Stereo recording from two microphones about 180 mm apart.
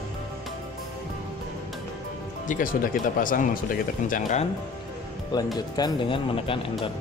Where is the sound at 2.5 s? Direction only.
50° left (ahead or behind).